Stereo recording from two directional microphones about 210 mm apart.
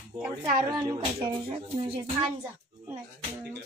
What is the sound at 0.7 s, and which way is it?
Speech, 20° right (ahead or behind).